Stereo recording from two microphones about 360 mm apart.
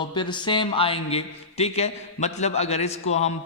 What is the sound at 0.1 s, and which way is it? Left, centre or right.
A man's voice, centre.